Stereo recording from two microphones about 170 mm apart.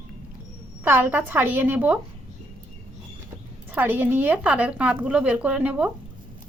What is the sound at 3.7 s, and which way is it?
A woman's voice, 10° right (ahead or behind).